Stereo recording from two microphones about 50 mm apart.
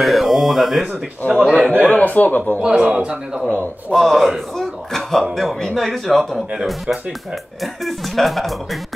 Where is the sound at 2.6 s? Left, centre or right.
Centre.